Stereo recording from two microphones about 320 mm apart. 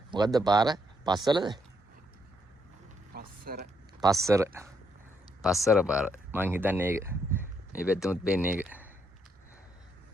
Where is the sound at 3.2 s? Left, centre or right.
Right.